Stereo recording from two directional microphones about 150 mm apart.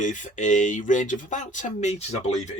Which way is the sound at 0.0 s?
55° left (ahead or behind).